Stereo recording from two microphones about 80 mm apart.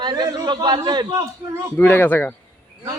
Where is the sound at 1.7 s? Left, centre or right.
Left.